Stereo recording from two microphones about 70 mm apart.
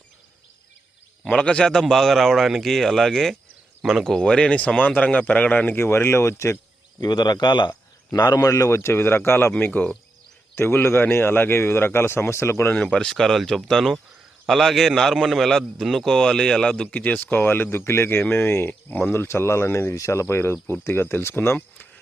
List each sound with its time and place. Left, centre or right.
1.3 s a man's voice: centre
5.8 s speech: left
7.0 s a man's voice: left
8.4 s a man's voice: left
10.5 s speech: left
12.7 s a man's voice: centre
16.9 s speech: left